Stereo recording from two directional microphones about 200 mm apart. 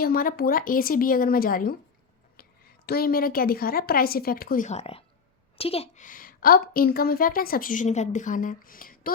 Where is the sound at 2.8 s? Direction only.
50° left (ahead or behind).